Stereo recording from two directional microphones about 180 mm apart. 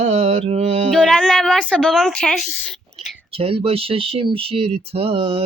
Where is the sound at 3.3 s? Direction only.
30° right (ahead or behind).